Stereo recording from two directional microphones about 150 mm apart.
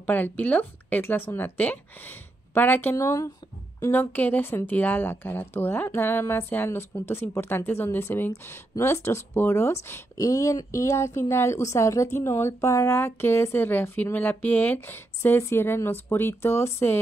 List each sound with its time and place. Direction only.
0.0 s speech: 10° left (ahead or behind)